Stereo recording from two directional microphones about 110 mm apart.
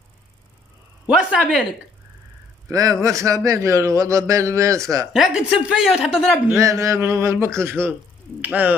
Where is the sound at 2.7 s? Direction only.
30° right (ahead or behind).